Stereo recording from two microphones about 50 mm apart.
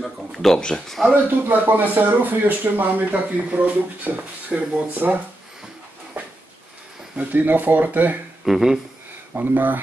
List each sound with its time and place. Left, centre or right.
0.0 s a sound: centre
0.6 s speech: centre
1.1 s speech: right
7.2 s speech: right
8.5 s speech: centre
9.3 s speech: right